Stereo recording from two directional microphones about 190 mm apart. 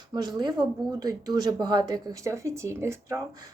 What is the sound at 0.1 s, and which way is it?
Speech, 20° right (ahead or behind).